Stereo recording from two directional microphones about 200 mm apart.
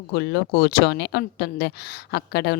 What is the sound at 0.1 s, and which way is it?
A woman's voice, 55° left (ahead or behind).